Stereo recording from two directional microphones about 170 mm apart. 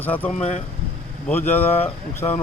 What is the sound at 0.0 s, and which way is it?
Speech, 10° left (ahead or behind).